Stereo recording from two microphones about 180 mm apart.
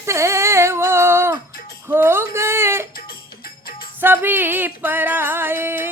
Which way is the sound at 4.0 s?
10° right (ahead or behind).